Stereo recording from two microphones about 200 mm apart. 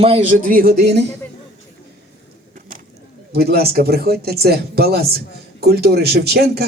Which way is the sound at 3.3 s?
50° right (ahead or behind).